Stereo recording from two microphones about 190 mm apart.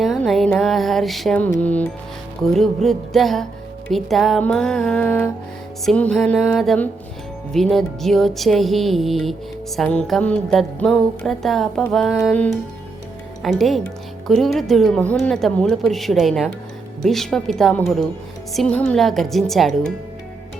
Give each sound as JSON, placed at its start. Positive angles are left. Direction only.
{"t": 0.0, "sound": "music", "side_deg": 0}